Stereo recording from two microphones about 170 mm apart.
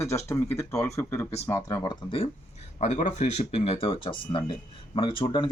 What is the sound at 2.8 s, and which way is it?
Speech, 45° left (ahead or behind).